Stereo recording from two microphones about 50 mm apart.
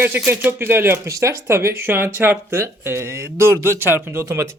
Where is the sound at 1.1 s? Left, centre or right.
Right.